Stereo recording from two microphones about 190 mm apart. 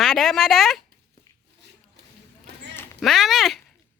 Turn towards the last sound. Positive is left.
turn(degrees=0)  # may be behind; listen again after turning